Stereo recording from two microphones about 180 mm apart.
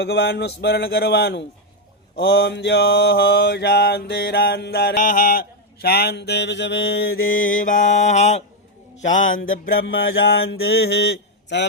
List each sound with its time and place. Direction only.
0.0 s mantra: 65° left (ahead or behind); by 8.4 s 40° left (ahead or behind)
9.0 s a man's voice: 45° left (ahead or behind)
9.6 s mantra: 60° left (ahead or behind)